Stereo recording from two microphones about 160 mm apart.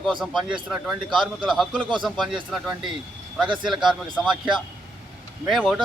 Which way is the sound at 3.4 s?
30° right (ahead or behind).